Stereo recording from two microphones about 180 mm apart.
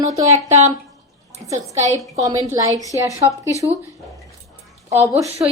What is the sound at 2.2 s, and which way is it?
Speech, 20° right (ahead or behind).